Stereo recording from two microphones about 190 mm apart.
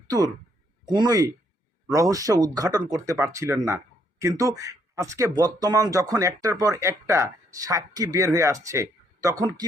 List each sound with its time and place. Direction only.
0.9 s speech: 20° right (ahead or behind)
8.6 s a sound: 15° right (ahead or behind)
9.4 s speech: 20° right (ahead or behind)